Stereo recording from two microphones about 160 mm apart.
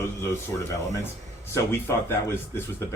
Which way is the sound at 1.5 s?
15° left (ahead or behind).